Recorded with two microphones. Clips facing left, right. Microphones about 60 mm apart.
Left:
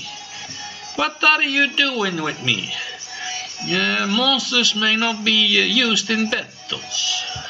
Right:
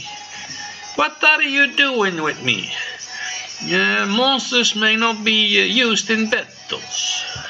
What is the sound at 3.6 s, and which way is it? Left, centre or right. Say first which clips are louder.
Music: right 4 dB; centre.